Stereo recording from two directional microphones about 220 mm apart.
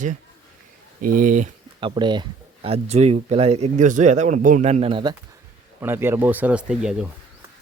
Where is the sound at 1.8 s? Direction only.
20° right (ahead or behind).